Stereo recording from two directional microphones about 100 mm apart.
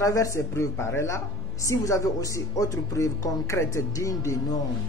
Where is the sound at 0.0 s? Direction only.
30° left (ahead or behind).